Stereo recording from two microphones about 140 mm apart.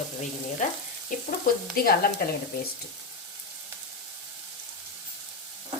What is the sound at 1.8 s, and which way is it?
Speech, 90° left.